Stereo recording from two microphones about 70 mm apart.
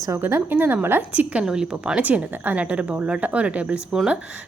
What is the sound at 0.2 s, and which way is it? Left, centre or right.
Speech, right.